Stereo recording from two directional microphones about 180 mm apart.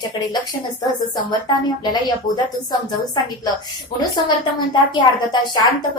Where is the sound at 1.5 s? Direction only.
25° left (ahead or behind).